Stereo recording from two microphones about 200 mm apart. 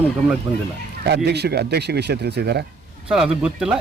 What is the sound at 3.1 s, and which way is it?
Speech, 5° right (ahead or behind).